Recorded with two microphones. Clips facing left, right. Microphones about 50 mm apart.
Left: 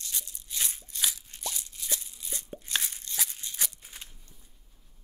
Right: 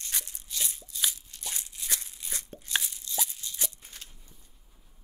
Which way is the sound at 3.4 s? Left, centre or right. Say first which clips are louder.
Even; left.